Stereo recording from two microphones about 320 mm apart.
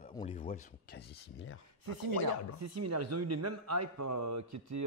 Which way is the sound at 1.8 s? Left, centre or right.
Right.